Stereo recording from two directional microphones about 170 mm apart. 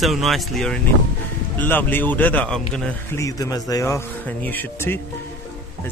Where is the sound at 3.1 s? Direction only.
20° left (ahead or behind).